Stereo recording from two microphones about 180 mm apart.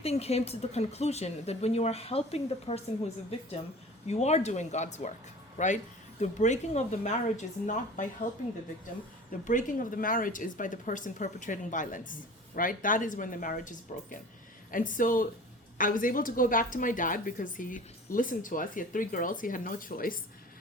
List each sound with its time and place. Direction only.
0.0 s speech: 35° left (ahead or behind)
4.0 s speech: 40° left (ahead or behind)
9.4 s a woman's voice: 45° left (ahead or behind)